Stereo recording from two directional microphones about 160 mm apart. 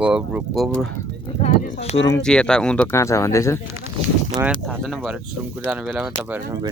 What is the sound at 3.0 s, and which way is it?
Speech, 20° left (ahead or behind).